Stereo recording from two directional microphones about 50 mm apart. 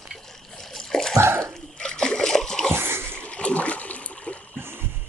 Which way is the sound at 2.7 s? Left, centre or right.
Right.